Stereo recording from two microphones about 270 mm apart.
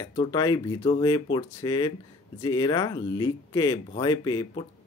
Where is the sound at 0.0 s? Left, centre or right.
Centre.